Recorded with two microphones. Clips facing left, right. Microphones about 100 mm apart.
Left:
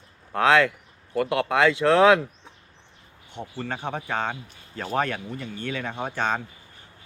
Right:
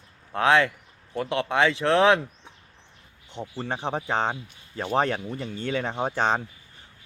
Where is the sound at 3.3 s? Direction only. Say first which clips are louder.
Right 1 dB; 20° right (ahead or behind).